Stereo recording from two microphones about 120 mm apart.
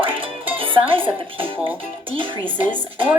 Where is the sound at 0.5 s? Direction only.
50° right (ahead or behind).